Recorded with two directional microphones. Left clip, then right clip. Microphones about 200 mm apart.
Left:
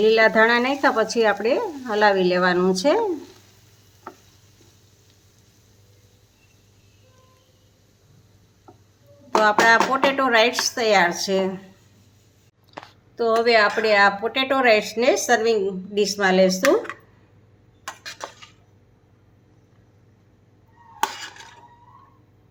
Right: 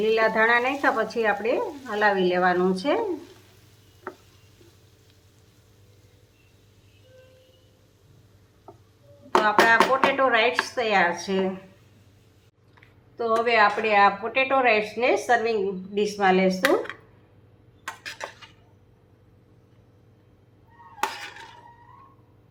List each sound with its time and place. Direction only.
0.0 s speech: 60° left (ahead or behind)
8.7 s music: centre (ahead or behind)
9.4 s speech: 60° left (ahead or behind)
13.1 s speech: 60° left (ahead or behind)